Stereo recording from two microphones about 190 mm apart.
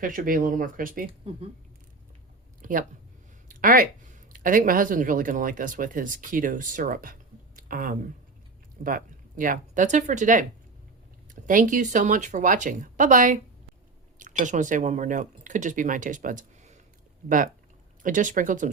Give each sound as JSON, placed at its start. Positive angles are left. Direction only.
{"t": 0.0, "sound": "speech", "side_deg": -45}
{"t": 2.6, "sound": "a sound", "side_deg": -45}
{"t": 3.5, "sound": "speech", "side_deg": -45}